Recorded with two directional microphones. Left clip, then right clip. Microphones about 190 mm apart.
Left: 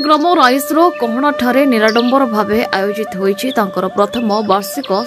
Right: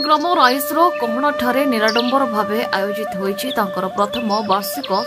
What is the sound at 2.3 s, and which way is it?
Speech, 15° left (ahead or behind).